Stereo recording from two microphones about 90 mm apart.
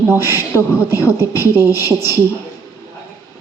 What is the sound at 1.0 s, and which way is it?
A woman's voice, 30° right (ahead or behind).